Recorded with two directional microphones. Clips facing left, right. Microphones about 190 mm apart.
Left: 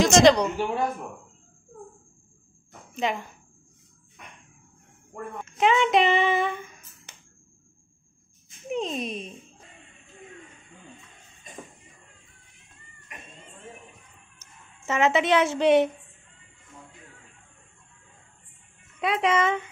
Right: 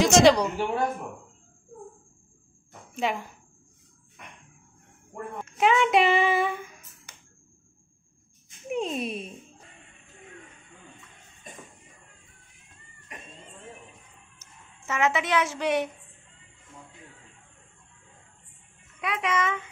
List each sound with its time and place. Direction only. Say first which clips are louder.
0.0 s speech: left 1 dB; 10° right (ahead or behind)
2.9 s a woman's voice: left 1 dB; 5° right (ahead or behind)
5.4 s a sound: even; 5° right (ahead or behind)
8.6 s speech: even; 5° right (ahead or behind)
14.9 s a woman's voice: left 4 dB; 25° left (ahead or behind)
18.9 s a child's voice: left 5 dB; 30° left (ahead or behind)